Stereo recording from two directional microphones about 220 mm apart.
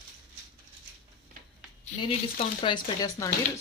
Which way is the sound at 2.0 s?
25° left (ahead or behind).